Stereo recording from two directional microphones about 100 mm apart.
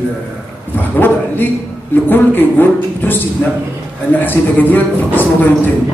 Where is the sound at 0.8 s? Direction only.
20° left (ahead or behind).